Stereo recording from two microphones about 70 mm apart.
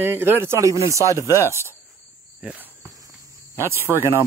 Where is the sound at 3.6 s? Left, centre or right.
Right.